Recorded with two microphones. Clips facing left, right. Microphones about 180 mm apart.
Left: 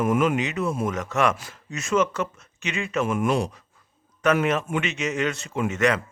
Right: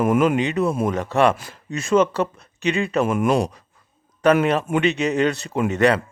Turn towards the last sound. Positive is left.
turn(degrees=-35)  # may be behind; listen again after turning